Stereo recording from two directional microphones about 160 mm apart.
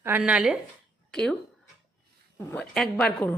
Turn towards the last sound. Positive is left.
turn(degrees=5)  # may be behind; listen again after turning